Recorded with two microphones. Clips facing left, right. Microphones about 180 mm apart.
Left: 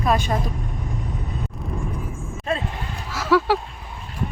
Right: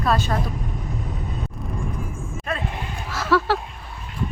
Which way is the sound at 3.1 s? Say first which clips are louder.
Left 2 dB; 10° left (ahead or behind).